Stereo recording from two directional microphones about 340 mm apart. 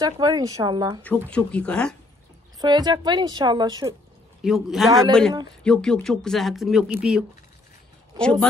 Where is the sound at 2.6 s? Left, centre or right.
Centre.